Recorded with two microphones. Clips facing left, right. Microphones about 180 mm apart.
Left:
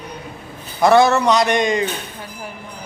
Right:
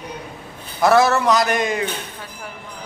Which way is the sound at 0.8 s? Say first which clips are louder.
Left 2 dB; centre (ahead or behind).